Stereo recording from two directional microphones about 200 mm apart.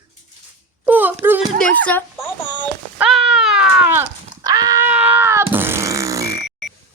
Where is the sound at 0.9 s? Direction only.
10° right (ahead or behind).